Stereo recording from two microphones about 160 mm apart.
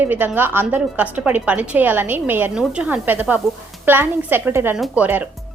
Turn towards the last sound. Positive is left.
turn(degrees=-10)  # may be behind; listen again after turning